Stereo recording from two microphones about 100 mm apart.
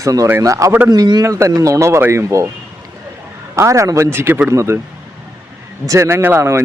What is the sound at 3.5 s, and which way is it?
A man's voice, 30° right (ahead or behind).